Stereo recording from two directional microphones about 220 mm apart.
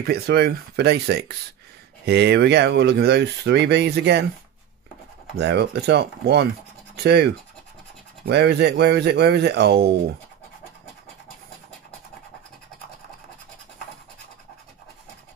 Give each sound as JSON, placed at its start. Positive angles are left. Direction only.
{"t": 0.0, "sound": "speech", "side_deg": -45}
{"t": 5.4, "sound": "speech", "side_deg": -50}